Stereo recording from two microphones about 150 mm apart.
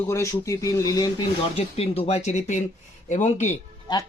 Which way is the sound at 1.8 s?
40° left (ahead or behind).